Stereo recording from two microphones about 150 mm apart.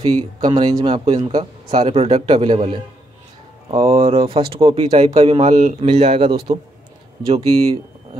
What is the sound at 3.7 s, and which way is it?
A man's voice, 40° right (ahead or behind).